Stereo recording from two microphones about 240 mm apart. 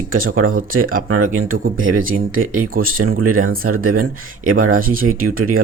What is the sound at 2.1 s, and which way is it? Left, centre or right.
Speech, right.